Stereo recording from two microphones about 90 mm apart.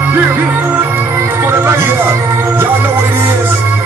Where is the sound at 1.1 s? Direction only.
30° right (ahead or behind).